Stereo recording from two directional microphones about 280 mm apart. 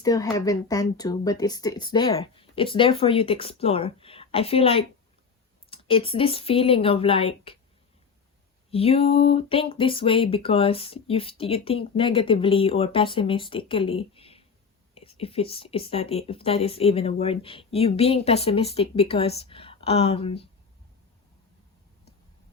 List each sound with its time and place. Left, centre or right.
0.0 s speech: centre
8.7 s speech: left